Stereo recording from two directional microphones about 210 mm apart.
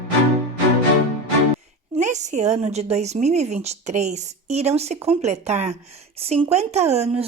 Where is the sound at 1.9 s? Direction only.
35° right (ahead or behind).